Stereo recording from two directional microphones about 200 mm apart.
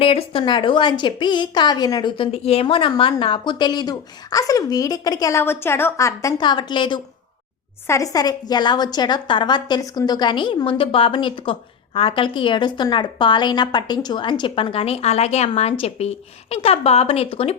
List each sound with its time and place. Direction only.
0.0 s a woman's voice: 30° left (ahead or behind)